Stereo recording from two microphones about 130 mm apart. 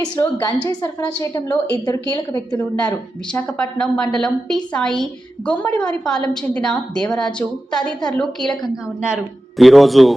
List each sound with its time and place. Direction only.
0.2 s a woman's voice: 30° left (ahead or behind)
1.5 s a woman's voice: 10° left (ahead or behind)
1.8 s a woman's voice: 25° left (ahead or behind)
3.3 s a woman's voice: 10° left (ahead or behind)
8.7 s a woman's voice: 5° right (ahead or behind)